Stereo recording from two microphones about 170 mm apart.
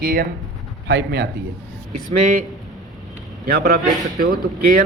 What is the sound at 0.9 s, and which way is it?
Speech, 85° right.